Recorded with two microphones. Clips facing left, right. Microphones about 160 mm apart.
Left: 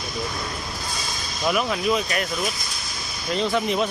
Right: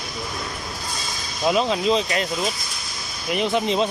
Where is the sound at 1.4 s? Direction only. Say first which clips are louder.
Right 3 dB; 25° right (ahead or behind).